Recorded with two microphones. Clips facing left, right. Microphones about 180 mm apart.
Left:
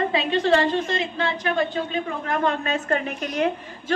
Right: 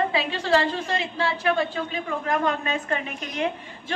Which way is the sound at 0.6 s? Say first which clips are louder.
Left 3 dB; 30° right (ahead or behind).